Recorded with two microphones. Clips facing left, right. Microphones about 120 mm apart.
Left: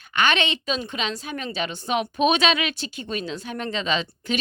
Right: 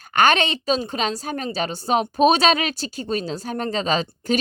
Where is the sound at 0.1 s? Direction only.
45° right (ahead or behind).